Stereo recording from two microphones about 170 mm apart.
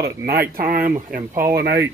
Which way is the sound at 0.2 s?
60° right (ahead or behind).